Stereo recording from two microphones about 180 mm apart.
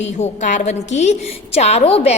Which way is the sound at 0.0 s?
40° left (ahead or behind).